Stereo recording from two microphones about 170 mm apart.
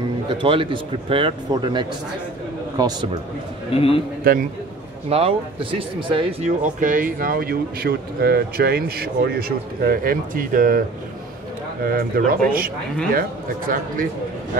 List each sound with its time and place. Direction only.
0.4 s a man's voice: 30° right (ahead or behind)
3.7 s a man's voice: 35° left (ahead or behind)
4.2 s a man's voice: 60° right (ahead or behind)
5.1 s a man's voice: 35° right (ahead or behind)
6.6 s speech: 50° right (ahead or behind)
11.8 s speech: 60° right (ahead or behind)